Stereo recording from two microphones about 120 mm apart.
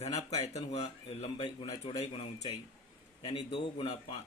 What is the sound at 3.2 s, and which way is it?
Speech, 50° left (ahead or behind).